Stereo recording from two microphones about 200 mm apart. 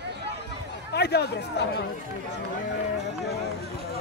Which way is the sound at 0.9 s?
55° left (ahead or behind).